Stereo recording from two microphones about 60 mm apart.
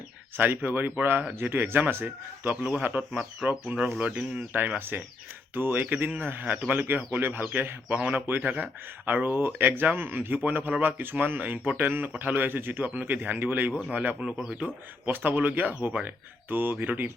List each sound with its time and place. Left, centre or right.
0.3 s speech: right; by 4.2 s centre
4.2 s speech: right
12.9 s speech: right